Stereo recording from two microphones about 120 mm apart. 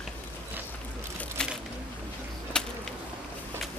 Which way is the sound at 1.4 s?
5° left (ahead or behind).